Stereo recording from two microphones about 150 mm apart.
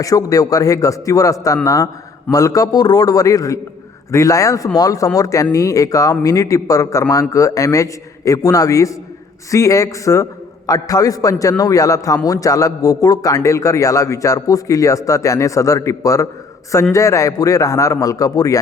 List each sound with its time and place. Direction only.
0.0 s a man's voice: 25° left (ahead or behind)